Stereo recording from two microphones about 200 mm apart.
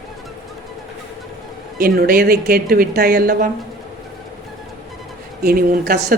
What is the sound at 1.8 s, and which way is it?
Speech, 50° right (ahead or behind).